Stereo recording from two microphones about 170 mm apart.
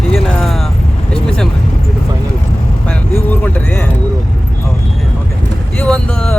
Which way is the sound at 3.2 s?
10° left (ahead or behind).